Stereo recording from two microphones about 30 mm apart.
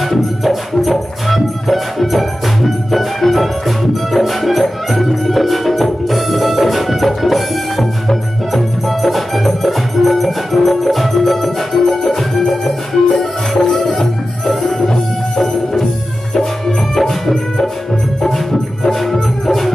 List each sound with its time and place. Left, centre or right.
0.4 s music: centre
14.7 s music: centre
16.6 s music: centre